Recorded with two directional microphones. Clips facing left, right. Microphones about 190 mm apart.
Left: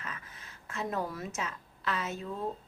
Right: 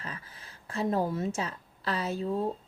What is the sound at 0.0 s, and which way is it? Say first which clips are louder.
A woman's voice: right 2 dB; 30° right (ahead or behind).